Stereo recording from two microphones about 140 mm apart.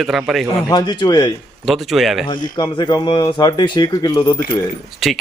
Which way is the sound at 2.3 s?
35° left (ahead or behind).